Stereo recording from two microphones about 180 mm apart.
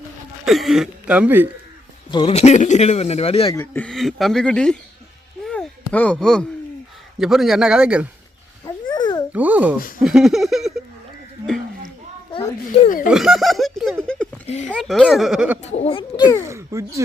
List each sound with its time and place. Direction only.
0.4 s speech: centre (ahead or behind)
2.0 s speech: 25° left (ahead or behind)
2.3 s speech: 40° left (ahead or behind)
3.5 s speech: 10° left (ahead or behind)
5.5 s a sound: 5° left (ahead or behind)
7.2 s speech: centre (ahead or behind)
8.6 s babbling: 25° left (ahead or behind)
9.3 s speech: 10° right (ahead or behind)
12.3 s a child's voice: 30° left (ahead or behind)
13.1 s speech: centre (ahead or behind)
14.4 s speech: 40° left (ahead or behind)
14.8 s speech: centre (ahead or behind)
15.6 s speech: 35° left (ahead or behind)
16.4 s speech: 15° right (ahead or behind)